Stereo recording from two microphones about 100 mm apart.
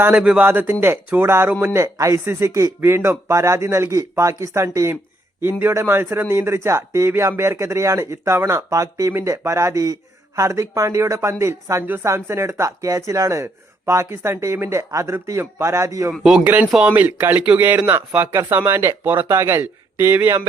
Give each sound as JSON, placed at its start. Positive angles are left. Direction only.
{"t": 0.2, "sound": "speech", "side_deg": -10}
{"t": 0.4, "sound": "speech", "side_deg": -20}
{"t": 16.1, "sound": "speech", "side_deg": -5}
{"t": 16.9, "sound": "speech", "side_deg": -20}